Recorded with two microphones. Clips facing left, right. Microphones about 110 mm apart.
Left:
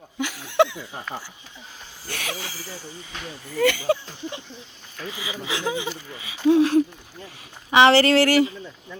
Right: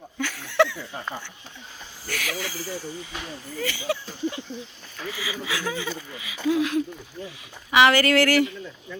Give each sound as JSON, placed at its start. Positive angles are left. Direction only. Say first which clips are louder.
{"t": 0.2, "sound": "a sound", "louder": "left 2 dB", "side_deg": 15}
{"t": 2.0, "sound": "speech", "louder": "right 2 dB", "side_deg": 30}
{"t": 3.9, "sound": "speech", "louder": "left 5 dB", "side_deg": 30}
{"t": 5.0, "sound": "speech", "louder": "even", "side_deg": 20}
{"t": 6.1, "sound": "speech", "louder": "left 6 dB", "side_deg": 30}